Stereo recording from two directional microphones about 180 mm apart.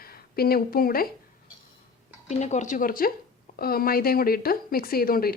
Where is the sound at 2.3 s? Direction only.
40° left (ahead or behind); by 5.3 s 55° left (ahead or behind).